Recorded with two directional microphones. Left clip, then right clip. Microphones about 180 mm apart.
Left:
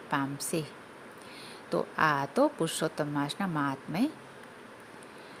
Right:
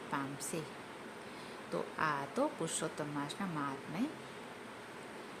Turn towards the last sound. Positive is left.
turn(degrees=45)  # may be behind; listen again after turning